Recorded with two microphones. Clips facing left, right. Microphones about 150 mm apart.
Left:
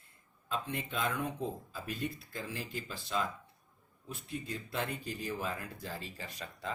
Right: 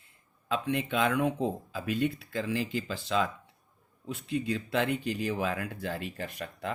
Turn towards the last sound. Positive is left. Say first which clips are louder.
# right 6 dB
turn(degrees=-60)  # may be behind; listen again after turning